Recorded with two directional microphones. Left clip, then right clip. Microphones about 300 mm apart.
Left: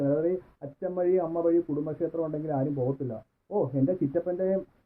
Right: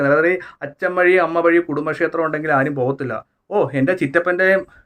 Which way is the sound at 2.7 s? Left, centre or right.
Right.